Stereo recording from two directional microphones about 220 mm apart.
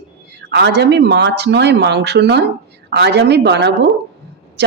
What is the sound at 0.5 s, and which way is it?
Speech, 50° right (ahead or behind).